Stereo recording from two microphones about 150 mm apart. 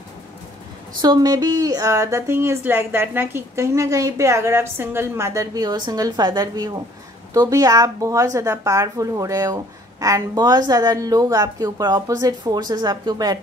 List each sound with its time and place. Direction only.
1.0 s speech: 25° right (ahead or behind)